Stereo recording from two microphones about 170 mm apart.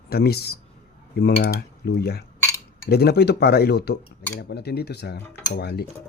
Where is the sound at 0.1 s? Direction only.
65° left (ahead or behind).